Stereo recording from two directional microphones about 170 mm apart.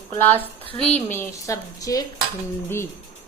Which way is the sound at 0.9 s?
15° left (ahead or behind).